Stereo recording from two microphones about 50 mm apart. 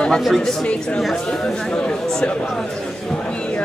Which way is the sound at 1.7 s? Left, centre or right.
Centre.